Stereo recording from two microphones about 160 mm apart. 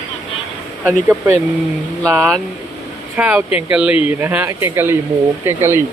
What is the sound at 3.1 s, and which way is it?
Speech, 10° right (ahead or behind).